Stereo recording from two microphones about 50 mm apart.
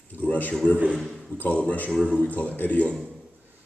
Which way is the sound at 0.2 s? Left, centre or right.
Left.